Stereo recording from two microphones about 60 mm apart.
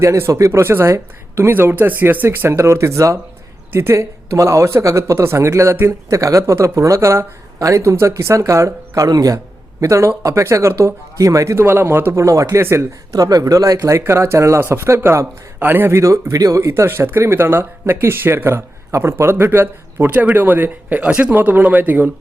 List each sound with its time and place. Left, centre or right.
0.0 s speech: right
0.6 s speech: right
6.1 s speech: right
9.1 s a man's voice: right
9.8 s speech: right
11.5 s a man's voice: right
12.2 s speech: right
13.1 s speech: right
14.1 s speech: right
14.6 s speech: right
15.5 s speech: right
15.9 s speech: right
16.6 s a man's voice: right
20.1 s speech: right